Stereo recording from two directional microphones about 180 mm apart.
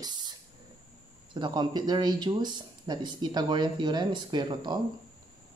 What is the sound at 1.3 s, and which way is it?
Speech, 25° right (ahead or behind).